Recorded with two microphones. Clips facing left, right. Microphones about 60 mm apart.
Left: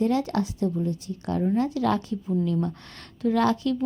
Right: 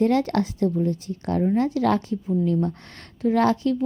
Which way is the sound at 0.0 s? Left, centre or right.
Right.